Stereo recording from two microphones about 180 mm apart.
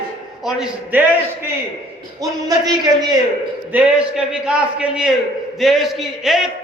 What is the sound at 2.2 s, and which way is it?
Speech, 20° right (ahead or behind).